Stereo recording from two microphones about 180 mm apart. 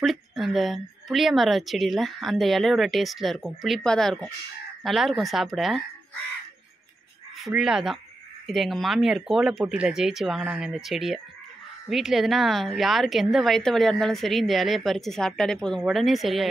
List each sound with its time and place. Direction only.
0.0 s a woman's voice: centre (ahead or behind)
7.3 s a woman's voice: centre (ahead or behind)